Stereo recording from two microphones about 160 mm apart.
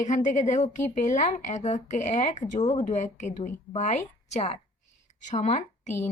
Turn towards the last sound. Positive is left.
turn(degrees=45)  # may be behind; listen again after turning